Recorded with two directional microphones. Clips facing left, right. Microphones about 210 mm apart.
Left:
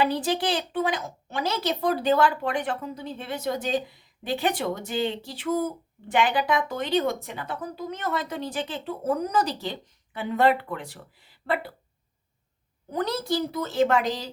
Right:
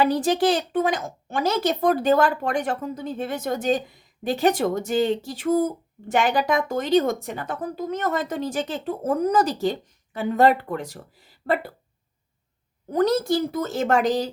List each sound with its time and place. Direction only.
0.0 s speech: 45° right (ahead or behind)
12.9 s speech: 45° right (ahead or behind)